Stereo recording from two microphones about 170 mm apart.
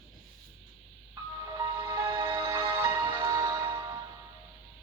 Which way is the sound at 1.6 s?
20° right (ahead or behind).